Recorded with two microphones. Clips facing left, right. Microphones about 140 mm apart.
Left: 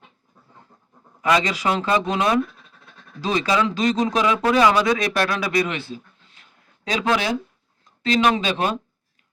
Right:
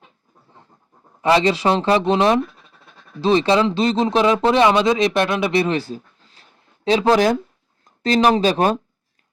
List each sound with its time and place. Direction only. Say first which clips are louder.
1.2 s speech: right 4 dB; 30° right (ahead or behind)